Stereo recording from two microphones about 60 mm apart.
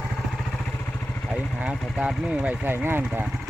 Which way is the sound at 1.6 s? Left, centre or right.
Centre.